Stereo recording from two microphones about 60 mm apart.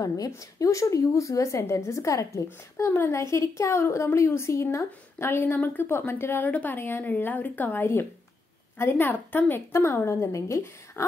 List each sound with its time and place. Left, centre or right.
0.4 s a woman's voice: left
6.4 s a woman's voice: left
7.8 s a woman's voice: left
9.7 s a woman's voice: left